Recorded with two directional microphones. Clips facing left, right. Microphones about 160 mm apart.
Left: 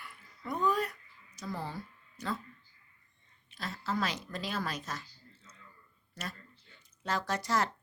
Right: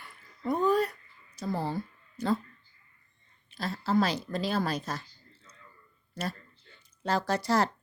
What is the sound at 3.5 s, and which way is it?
Speech, 35° right (ahead or behind).